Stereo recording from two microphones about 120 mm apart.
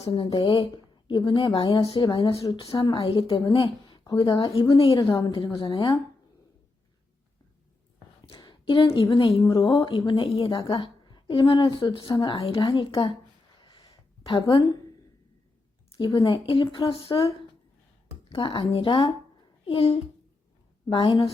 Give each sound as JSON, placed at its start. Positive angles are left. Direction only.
{"t": 0.1, "sound": "a woman's voice", "side_deg": 45}
{"t": 8.3, "sound": "a woman's voice", "side_deg": 40}
{"t": 13.6, "sound": "a sound", "side_deg": 45}
{"t": 16.0, "sound": "a woman's voice", "side_deg": 40}
{"t": 20.9, "sound": "a woman's voice", "side_deg": 45}